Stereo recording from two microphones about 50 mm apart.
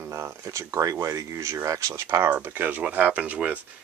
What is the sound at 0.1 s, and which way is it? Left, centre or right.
Speech, right.